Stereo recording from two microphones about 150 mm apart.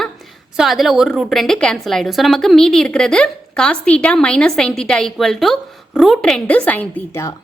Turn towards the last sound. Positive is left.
turn(degrees=15)  # may be behind; listen again after turning